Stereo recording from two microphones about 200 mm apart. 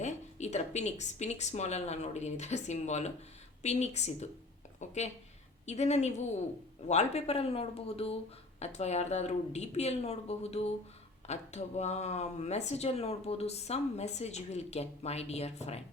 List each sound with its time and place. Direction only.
0.0 s speech: 35° left (ahead or behind)